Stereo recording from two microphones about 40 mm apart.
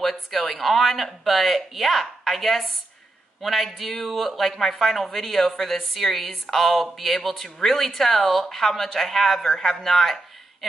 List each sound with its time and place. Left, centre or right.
0.0 s speech: centre